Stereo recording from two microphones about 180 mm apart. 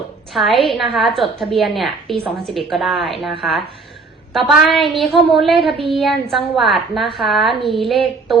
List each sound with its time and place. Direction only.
0.3 s a woman's voice: centre (ahead or behind)